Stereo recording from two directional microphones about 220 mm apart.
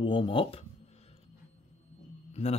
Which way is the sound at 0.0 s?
20° left (ahead or behind).